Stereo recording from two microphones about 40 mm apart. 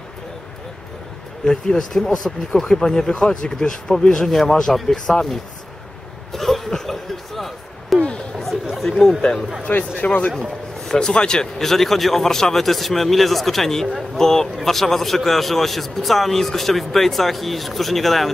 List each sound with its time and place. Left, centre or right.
1.4 s a man's voice: centre
1.8 s speech: centre
6.3 s a sound: centre
8.7 s chatter: centre
9.7 s speech: left
10.9 s a man's voice: left
11.6 s a man's voice: centre